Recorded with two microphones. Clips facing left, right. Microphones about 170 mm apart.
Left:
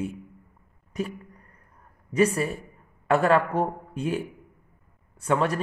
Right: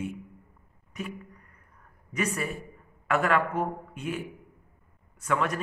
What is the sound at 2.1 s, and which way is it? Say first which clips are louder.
A man's voice: left 8 dB; 30° left (ahead or behind).